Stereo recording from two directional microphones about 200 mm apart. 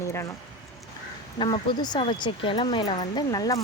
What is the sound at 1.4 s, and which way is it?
Speech, 25° left (ahead or behind).